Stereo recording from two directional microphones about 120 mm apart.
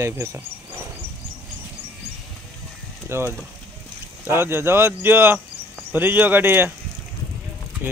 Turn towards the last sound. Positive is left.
turn(degrees=-15)  # may be behind; listen again after turning